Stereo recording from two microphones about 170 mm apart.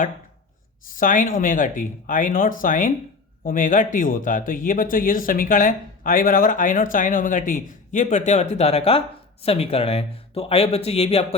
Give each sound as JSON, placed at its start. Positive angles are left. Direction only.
{"t": 0.9, "sound": "speech", "side_deg": 50}